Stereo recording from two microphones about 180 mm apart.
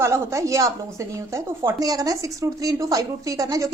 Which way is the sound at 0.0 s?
15° right (ahead or behind).